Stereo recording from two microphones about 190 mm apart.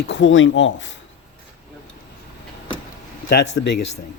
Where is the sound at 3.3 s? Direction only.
60° left (ahead or behind).